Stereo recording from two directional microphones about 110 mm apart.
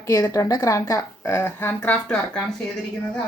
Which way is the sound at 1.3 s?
20° left (ahead or behind).